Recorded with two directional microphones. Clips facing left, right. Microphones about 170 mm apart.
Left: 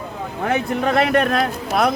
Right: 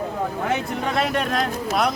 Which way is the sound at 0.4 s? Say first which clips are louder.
Left 8 dB; 60° left (ahead or behind).